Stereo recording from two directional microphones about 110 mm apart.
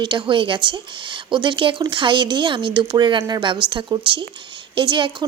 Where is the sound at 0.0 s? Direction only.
45° right (ahead or behind).